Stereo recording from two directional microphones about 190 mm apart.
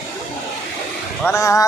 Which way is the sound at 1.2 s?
10° left (ahead or behind).